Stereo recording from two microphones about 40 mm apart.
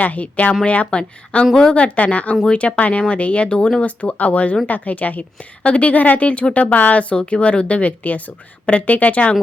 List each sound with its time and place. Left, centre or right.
0.0 s speech: left